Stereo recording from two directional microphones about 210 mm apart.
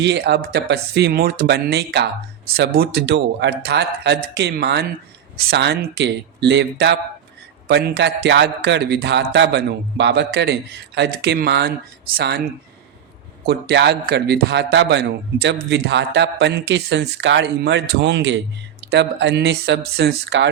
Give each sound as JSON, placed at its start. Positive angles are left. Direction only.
{"t": 0.0, "sound": "a man's voice", "side_deg": -55}
{"t": 13.4, "sound": "a man's voice", "side_deg": -50}